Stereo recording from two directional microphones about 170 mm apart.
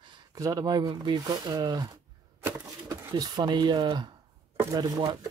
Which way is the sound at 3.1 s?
25° right (ahead or behind).